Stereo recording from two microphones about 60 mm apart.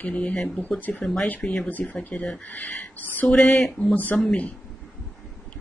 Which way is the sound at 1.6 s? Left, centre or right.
Left.